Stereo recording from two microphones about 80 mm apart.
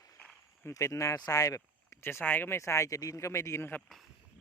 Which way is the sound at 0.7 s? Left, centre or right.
Left.